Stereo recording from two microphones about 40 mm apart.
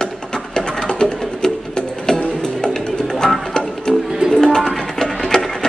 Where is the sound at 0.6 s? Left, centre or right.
Centre.